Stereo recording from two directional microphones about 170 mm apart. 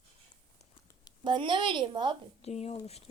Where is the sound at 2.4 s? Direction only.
40° left (ahead or behind).